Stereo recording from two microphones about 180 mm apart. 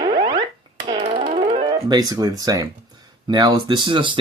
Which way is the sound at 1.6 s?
20° right (ahead or behind).